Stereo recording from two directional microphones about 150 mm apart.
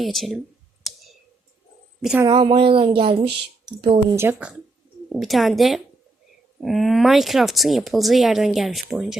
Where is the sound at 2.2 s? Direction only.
30° right (ahead or behind).